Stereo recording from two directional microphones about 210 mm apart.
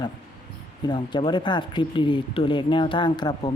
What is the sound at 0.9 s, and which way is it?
Speech, 20° left (ahead or behind).